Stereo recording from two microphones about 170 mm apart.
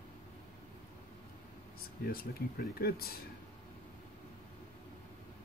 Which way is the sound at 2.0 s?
60° left (ahead or behind).